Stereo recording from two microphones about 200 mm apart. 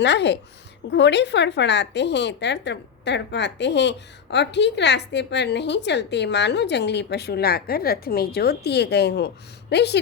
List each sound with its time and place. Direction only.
0.0 s speech: 60° left (ahead or behind)